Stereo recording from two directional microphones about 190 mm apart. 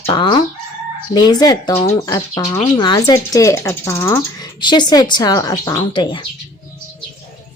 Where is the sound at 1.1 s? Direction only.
20° left (ahead or behind).